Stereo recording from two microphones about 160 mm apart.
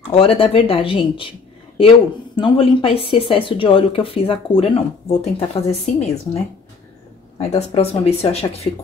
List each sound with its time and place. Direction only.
0.2 s speech: 35° left (ahead or behind)
7.3 s speech: 40° left (ahead or behind)